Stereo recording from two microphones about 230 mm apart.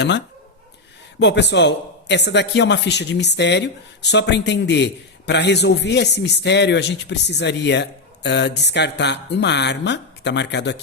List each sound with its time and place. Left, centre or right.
1.2 s a man's voice: left